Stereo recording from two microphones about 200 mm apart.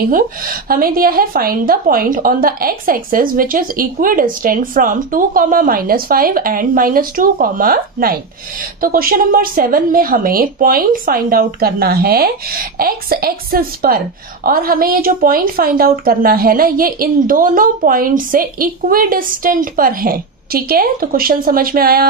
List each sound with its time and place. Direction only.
0.1 s a woman's voice: 45° right (ahead or behind)